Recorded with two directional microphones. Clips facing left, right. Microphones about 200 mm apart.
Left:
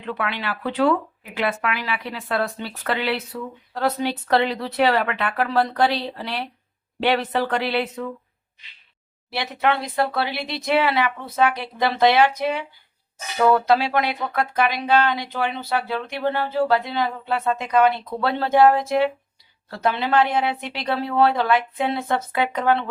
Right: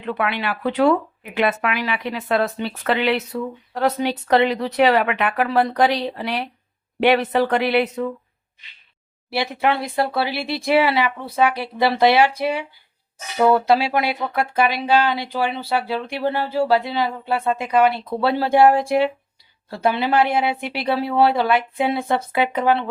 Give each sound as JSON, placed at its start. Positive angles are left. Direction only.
{"t": 0.0, "sound": "speech", "side_deg": -15}
{"t": 9.3, "sound": "speech", "side_deg": -10}
{"t": 9.9, "sound": "speech", "side_deg": -25}
{"t": 10.2, "sound": "speech", "side_deg": -10}
{"t": 13.7, "sound": "speech", "side_deg": -10}